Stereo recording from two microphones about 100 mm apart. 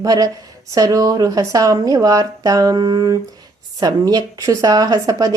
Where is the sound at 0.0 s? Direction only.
35° right (ahead or behind).